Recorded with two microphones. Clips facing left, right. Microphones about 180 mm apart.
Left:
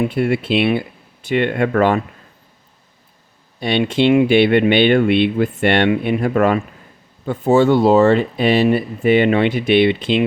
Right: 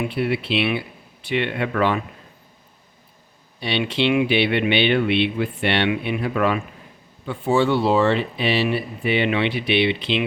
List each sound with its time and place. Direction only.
0.0 s speech: 45° left (ahead or behind)
3.6 s speech: 50° left (ahead or behind)